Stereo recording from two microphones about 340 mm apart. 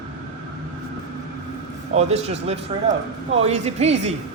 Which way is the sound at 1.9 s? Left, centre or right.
Centre.